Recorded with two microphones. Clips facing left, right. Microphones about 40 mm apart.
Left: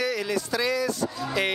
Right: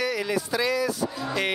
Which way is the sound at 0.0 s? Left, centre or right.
Centre.